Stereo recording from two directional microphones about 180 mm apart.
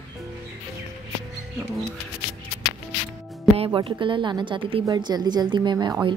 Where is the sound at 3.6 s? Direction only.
30° right (ahead or behind).